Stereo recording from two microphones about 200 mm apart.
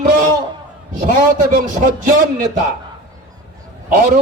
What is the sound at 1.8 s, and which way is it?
Speech, 45° right (ahead or behind).